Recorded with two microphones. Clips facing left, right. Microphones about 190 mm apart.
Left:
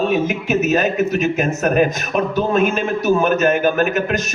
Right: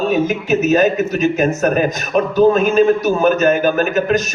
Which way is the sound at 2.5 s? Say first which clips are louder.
Right 5 dB; 35° right (ahead or behind).